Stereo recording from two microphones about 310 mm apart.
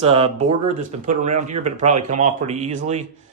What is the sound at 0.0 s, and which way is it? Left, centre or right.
Speech, centre.